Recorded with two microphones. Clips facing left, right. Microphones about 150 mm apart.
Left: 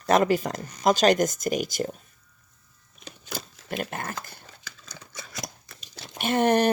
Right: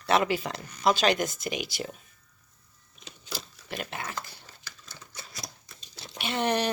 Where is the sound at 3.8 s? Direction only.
45° left (ahead or behind).